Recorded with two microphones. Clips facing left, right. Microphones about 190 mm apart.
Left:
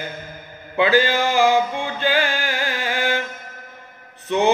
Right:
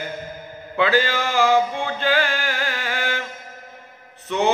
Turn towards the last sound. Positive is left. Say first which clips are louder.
# left 2 dB
turn(degrees=20)  # may be behind; listen again after turning